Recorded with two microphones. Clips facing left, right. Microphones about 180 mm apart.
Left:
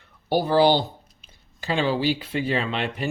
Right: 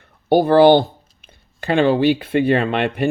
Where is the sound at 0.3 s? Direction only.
55° right (ahead or behind).